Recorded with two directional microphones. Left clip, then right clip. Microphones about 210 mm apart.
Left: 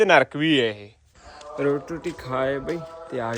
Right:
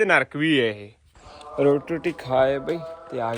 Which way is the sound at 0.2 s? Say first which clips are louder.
Left 1 dB; 10° left (ahead or behind).